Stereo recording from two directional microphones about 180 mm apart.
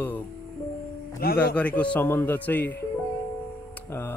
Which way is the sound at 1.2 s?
60° left (ahead or behind).